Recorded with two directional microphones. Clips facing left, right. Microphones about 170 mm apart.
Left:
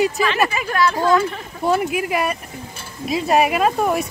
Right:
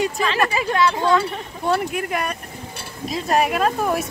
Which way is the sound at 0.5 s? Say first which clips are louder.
Even; 20° right (ahead or behind).